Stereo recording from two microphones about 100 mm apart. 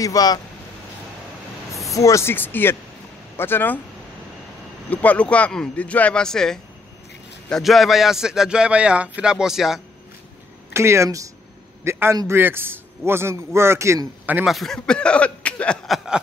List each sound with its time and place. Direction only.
0.0 s speech: 40° left (ahead or behind)
2.0 s speech: 30° left (ahead or behind)
4.8 s a man's voice: 15° left (ahead or behind); by 9.8 s 5° right (ahead or behind)
10.7 s speech: 25° right (ahead or behind)
11.8 s a sound: 25° right (ahead or behind)
12.3 s a man's voice: 20° right (ahead or behind)
14.4 s speech: centre (ahead or behind)